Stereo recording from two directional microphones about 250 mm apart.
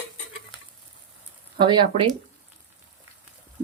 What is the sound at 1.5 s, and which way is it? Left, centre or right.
Speech, centre.